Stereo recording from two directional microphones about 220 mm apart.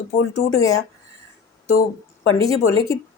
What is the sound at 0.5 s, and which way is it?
Speech, 15° left (ahead or behind).